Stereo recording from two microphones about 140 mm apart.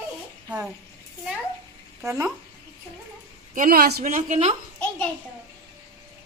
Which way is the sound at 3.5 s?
80° right.